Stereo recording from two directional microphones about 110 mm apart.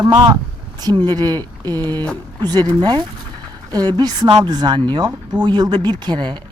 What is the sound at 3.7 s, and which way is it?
A woman's voice, 40° right (ahead or behind).